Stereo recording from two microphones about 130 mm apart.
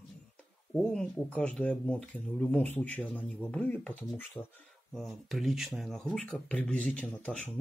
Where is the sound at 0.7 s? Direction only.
5° left (ahead or behind).